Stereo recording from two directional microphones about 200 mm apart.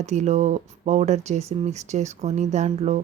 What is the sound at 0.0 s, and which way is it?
A woman's voice, 35° right (ahead or behind).